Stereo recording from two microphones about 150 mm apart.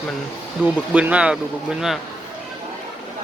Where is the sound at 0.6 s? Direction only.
10° right (ahead or behind).